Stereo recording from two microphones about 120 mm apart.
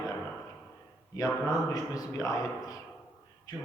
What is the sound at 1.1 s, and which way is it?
A man's voice, 30° left (ahead or behind).